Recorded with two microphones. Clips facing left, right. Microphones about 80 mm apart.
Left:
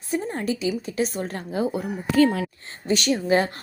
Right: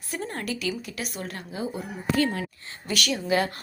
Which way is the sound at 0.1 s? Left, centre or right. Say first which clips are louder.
Left 6 dB; centre.